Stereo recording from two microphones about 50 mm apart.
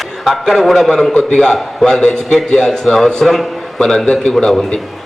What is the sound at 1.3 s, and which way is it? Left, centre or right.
A man's voice, centre.